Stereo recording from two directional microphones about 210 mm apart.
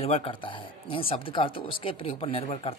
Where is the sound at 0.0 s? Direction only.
30° left (ahead or behind).